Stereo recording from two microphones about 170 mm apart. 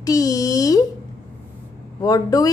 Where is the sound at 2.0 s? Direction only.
20° left (ahead or behind).